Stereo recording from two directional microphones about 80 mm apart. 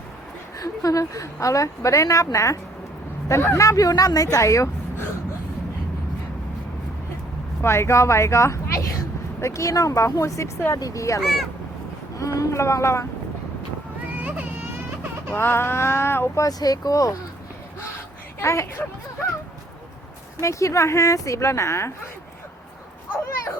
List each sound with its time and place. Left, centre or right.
0.6 s a woman's voice: left
7.6 s a woman's voice: left
11.2 s speech: centre
12.1 s speech: left
14.2 s a sound: centre
15.4 s speech: left
16.4 s a woman's voice: left
18.3 s speech: left
20.4 s speech: left